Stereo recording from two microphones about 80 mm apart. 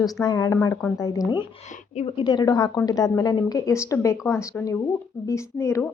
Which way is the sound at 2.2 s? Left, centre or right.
Left.